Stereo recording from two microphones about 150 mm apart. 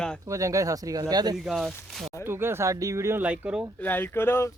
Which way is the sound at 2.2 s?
15° right (ahead or behind).